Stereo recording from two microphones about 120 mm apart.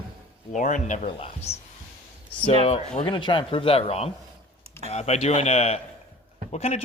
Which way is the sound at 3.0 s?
40° left (ahead or behind).